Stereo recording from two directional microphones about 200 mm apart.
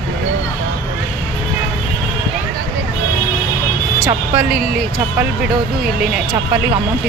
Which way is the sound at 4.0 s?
5° right (ahead or behind).